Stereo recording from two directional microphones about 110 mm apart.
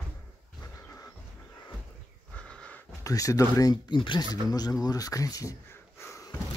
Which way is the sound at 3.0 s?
30° left (ahead or behind).